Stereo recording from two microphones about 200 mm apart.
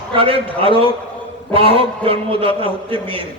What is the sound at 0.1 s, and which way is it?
A man's voice, 25° right (ahead or behind).